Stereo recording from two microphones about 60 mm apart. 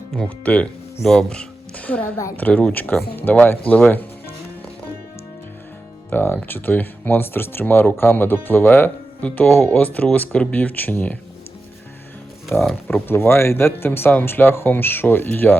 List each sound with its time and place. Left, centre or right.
0.2 s speech: left
1.9 s speech: left
6.1 s speech: left
9.8 s speech: left
12.5 s speech: left